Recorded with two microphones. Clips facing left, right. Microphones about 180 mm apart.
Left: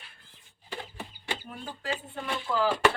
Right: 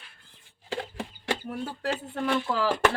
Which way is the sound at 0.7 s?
90° right.